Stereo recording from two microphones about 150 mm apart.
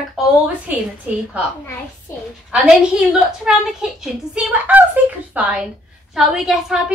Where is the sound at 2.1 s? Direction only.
20° left (ahead or behind).